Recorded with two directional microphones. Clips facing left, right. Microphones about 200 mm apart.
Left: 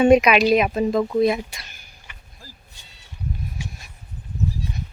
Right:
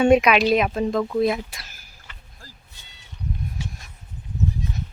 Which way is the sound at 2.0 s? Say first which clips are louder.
Left 1 dB; 15° left (ahead or behind).